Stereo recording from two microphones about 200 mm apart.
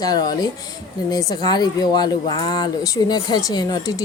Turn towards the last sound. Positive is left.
turn(degrees=20)  # may be behind; listen again after turning